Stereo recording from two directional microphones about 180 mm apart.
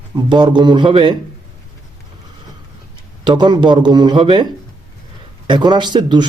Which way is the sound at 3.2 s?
25° right (ahead or behind).